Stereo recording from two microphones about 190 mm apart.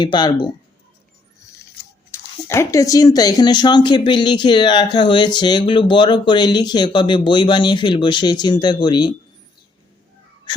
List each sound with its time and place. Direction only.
0.0 s speech: 25° left (ahead or behind)
2.0 s speech: 15° left (ahead or behind)